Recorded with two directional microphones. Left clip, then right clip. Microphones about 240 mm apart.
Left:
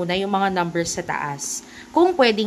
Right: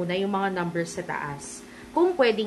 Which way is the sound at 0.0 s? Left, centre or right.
Left.